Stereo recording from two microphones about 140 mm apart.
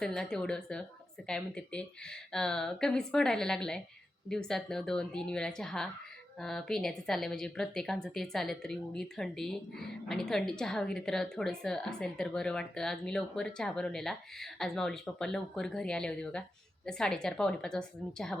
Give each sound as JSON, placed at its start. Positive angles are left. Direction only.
{"t": 0.0, "sound": "a woman's voice", "side_deg": 5}